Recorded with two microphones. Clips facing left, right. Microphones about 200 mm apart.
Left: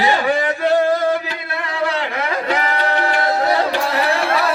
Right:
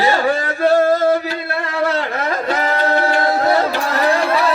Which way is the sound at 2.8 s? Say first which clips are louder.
Right 3 dB; 40° right (ahead or behind).